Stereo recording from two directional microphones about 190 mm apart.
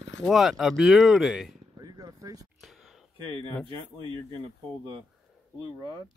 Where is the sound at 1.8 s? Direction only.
20° right (ahead or behind).